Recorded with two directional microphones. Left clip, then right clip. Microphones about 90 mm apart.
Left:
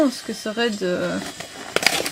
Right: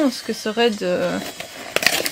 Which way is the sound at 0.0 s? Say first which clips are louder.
Even; 25° right (ahead or behind).